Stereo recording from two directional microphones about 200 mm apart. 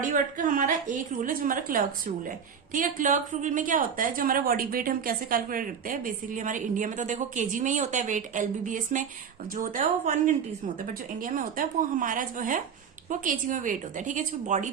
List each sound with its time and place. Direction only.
0.0 s a woman's voice: 40° right (ahead or behind)